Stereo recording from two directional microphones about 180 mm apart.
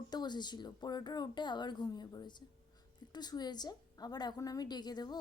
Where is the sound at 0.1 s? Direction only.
25° left (ahead or behind).